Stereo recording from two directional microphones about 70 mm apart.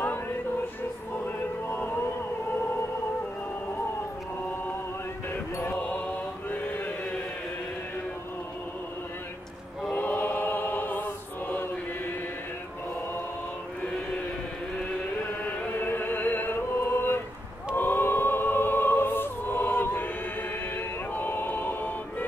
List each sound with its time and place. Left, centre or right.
1.2 s music: left
5.3 s chant: left
5.8 s chant: left
9.9 s choir: left
15.4 s music: left